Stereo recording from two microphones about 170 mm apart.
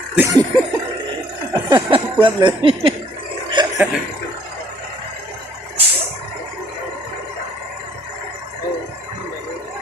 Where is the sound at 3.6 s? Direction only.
25° right (ahead or behind).